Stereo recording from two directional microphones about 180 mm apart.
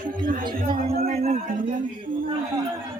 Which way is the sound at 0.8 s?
35° right (ahead or behind).